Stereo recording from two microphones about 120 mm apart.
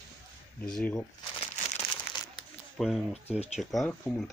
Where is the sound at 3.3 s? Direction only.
60° left (ahead or behind).